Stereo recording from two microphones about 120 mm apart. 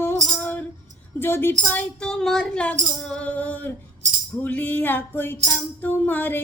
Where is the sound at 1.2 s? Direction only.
20° left (ahead or behind).